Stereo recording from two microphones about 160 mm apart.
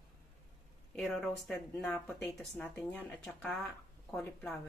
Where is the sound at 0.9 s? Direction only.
Centre (ahead or behind).